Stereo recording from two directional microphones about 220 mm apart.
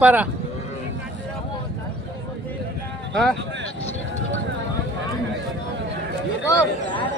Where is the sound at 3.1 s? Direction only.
5° left (ahead or behind).